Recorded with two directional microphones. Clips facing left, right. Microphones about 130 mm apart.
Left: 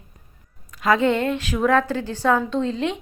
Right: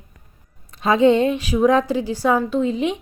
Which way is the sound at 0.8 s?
20° right (ahead or behind).